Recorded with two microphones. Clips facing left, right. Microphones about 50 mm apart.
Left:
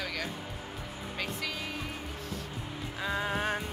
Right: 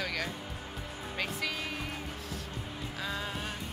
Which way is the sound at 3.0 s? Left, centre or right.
Left.